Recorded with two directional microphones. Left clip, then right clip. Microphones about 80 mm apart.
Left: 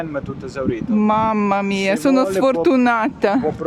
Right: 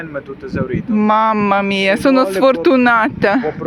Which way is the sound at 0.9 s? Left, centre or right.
Centre.